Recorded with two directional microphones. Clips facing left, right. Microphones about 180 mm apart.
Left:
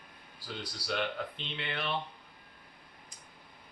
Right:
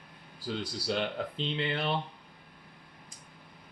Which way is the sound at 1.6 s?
30° right (ahead or behind).